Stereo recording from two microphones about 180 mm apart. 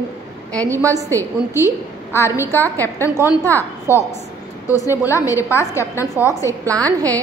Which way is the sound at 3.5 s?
15° left (ahead or behind).